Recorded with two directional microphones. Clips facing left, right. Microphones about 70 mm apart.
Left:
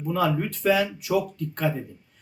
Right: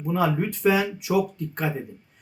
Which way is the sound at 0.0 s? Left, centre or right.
Centre.